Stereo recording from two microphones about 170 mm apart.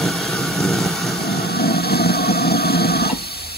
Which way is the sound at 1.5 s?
70° left (ahead or behind).